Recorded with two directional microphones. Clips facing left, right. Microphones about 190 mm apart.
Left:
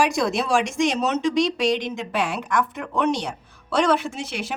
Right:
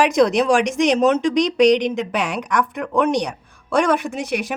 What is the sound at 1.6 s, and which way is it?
Speech, 20° right (ahead or behind).